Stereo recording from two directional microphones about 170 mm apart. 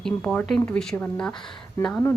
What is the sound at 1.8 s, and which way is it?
Speech, 15° left (ahead or behind).